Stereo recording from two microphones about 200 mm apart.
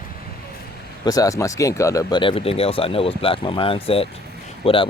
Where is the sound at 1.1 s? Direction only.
15° left (ahead or behind).